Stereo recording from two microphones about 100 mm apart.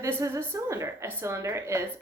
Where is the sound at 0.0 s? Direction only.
30° right (ahead or behind).